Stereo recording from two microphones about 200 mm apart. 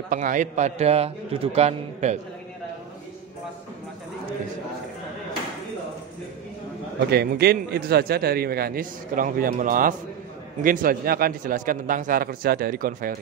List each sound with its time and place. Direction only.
0.1 s a man's voice: 40° right (ahead or behind)
7.1 s a man's voice: 55° right (ahead or behind)